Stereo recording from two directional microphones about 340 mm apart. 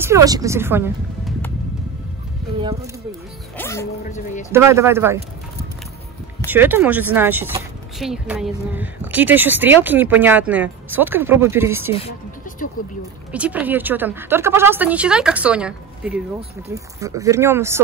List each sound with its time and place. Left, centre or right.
0.0 s speech: centre
3.5 s speech: centre
4.0 s speech: left
4.5 s speech: centre
6.4 s speech: centre
12.8 s speech: left
13.3 s speech: centre